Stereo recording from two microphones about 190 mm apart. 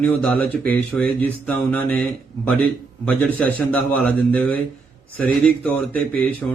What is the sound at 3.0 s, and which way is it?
A man's voice, 10° left (ahead or behind).